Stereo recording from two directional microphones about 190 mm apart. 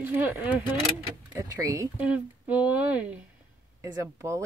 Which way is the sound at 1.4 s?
15° right (ahead or behind).